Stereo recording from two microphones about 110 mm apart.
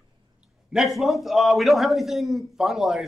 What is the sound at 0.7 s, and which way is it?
A man's voice, centre (ahead or behind).